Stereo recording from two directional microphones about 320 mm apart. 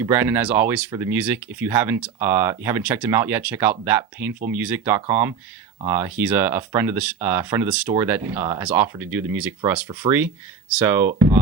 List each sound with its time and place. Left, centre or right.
0.0 s speech: centre